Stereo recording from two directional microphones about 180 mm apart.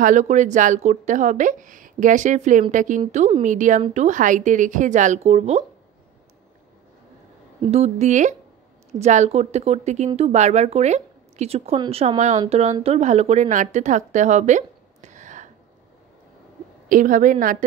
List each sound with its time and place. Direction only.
0.0 s speech: 45° right (ahead or behind)
7.7 s a woman's voice: 35° right (ahead or behind)
16.9 s speech: 45° right (ahead or behind)